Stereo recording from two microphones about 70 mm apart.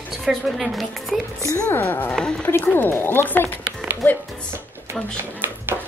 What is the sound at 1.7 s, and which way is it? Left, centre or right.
Speech, left.